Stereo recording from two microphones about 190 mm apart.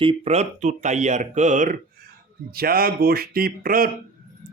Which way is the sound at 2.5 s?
50° right (ahead or behind).